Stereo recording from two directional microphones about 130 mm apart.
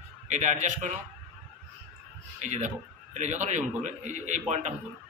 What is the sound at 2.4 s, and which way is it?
A man's voice, 65° right (ahead or behind).